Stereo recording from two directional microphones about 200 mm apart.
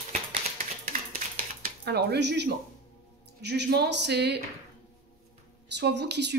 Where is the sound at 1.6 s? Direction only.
55° right (ahead or behind).